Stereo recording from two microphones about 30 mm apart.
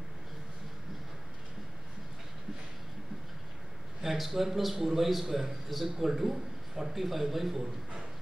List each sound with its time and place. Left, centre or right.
4.0 s speech: centre